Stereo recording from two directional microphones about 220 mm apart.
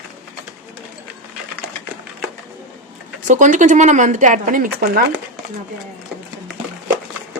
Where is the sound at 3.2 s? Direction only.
35° right (ahead or behind).